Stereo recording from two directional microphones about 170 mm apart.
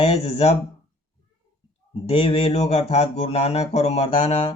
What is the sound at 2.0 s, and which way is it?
Speech, 35° left (ahead or behind).